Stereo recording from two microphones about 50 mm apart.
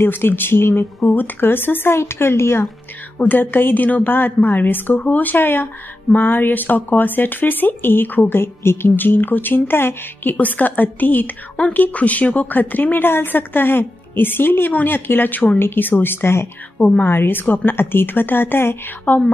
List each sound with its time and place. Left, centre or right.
0.0 s a woman's voice: left
1.0 s a woman's voice: left
2.0 s a woman's voice: left
3.2 s speech: left
8.4 s a woman's voice: left
10.3 s a woman's voice: left
14.7 s speech: left
15.0 s a woman's voice: left
19.1 s speech: left